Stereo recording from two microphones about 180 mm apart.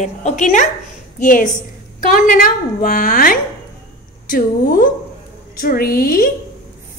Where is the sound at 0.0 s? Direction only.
40° left (ahead or behind).